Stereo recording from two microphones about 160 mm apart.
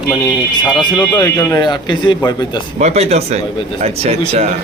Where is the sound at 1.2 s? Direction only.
20° left (ahead or behind).